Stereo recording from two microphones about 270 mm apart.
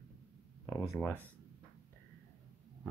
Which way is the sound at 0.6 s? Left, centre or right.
Centre.